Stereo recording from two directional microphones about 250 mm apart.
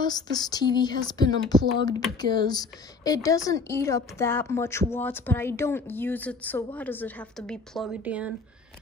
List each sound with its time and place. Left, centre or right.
0.0 s a woman's voice: centre